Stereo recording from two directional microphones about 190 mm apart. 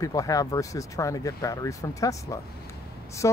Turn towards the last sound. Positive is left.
turn(degrees=15)  # may be behind; listen again after turning